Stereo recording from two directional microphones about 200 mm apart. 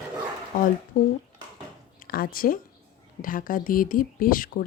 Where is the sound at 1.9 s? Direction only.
45° left (ahead or behind).